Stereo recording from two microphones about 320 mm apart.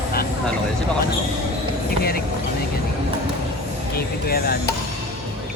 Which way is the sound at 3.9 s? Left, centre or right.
Left.